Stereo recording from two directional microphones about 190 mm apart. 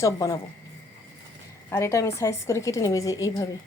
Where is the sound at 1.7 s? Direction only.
15° left (ahead or behind).